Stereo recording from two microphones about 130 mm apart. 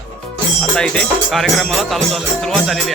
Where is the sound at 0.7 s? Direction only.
10° left (ahead or behind).